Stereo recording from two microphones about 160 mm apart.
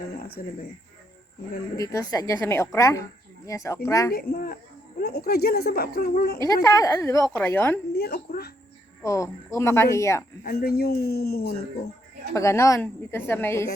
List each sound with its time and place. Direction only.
0.3 s speech: 70° left (ahead or behind)
1.7 s speech: 20° left (ahead or behind)
4.1 s speech: 75° left (ahead or behind)
6.6 s speech: 20° left (ahead or behind)
7.3 s a woman's voice: 10° left (ahead or behind)
7.9 s speech: 85° left
9.0 s a woman's voice: 20° left (ahead or behind)
10.4 s speech: 75° left (ahead or behind)
12.3 s a woman's voice: 20° left (ahead or behind)